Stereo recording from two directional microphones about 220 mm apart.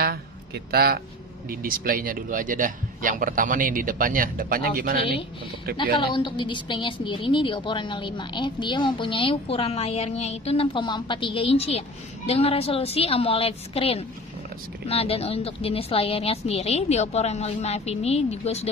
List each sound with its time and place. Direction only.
0.7 s speech: 45° right (ahead or behind)
5.9 s a woman's voice: 20° left (ahead or behind)